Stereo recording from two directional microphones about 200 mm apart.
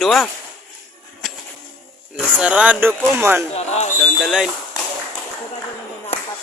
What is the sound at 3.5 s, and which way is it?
Speech, 35° left (ahead or behind).